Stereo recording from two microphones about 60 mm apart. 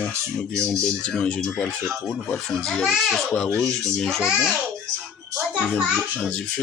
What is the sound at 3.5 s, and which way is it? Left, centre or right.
Speech, centre.